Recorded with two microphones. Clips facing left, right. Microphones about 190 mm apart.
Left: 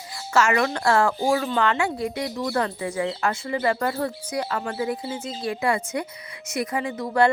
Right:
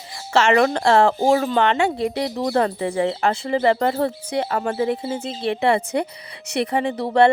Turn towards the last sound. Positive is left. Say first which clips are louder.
# right 5 dB
turn(degrees=-25)  # may be behind; listen again after turning